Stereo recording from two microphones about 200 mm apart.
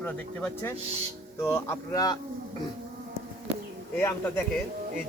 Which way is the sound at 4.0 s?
10° left (ahead or behind).